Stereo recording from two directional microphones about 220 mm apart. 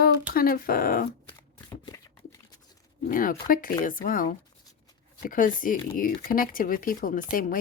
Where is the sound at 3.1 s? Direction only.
40° left (ahead or behind).